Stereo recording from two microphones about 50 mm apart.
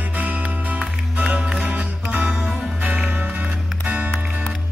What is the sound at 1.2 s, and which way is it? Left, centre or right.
Music, right.